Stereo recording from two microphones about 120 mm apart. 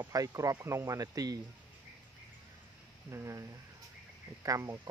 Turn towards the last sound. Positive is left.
turn(degrees=-25)  # may be behind; listen again after turning